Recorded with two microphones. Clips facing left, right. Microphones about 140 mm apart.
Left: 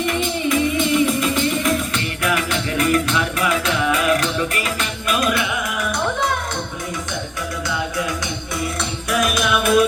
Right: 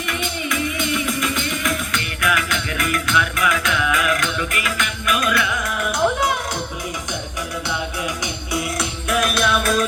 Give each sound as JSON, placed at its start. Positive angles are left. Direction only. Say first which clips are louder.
{"t": 0.0, "sound": "music", "louder": "left 6 dB", "side_deg": 30}
{"t": 8.8, "sound": "music", "louder": "left 2 dB", "side_deg": -5}
{"t": 9.4, "sound": "music", "louder": "left 3 dB", "side_deg": 10}